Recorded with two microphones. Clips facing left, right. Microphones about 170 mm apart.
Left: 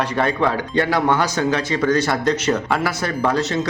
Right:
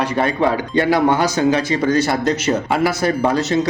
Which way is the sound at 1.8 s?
25° right (ahead or behind).